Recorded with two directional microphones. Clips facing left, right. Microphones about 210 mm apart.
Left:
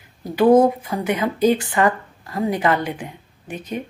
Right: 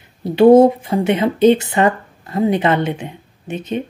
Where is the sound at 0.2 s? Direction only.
25° right (ahead or behind).